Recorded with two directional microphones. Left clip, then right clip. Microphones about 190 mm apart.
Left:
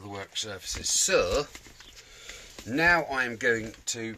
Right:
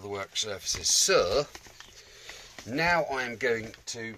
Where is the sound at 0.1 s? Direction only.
40° right (ahead or behind); by 1.5 s 20° right (ahead or behind).